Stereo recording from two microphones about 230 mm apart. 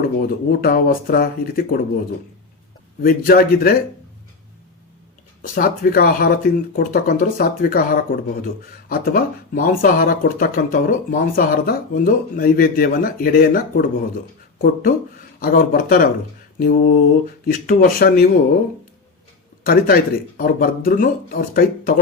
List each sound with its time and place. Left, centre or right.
0.2 s speech: left
3.0 s speech: left
5.4 s speech: left
19.6 s speech: left